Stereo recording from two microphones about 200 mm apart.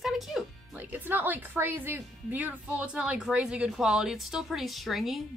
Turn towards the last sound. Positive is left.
turn(degrees=0)  # may be behind; listen again after turning